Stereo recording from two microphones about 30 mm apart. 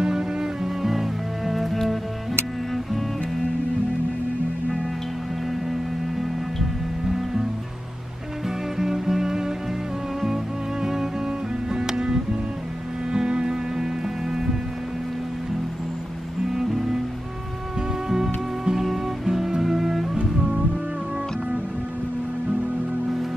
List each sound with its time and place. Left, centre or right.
0.0 s music: right
0.8 s music: centre
7.1 s music: centre
8.7 s music: centre
16.5 s music: centre
18.1 s music: centre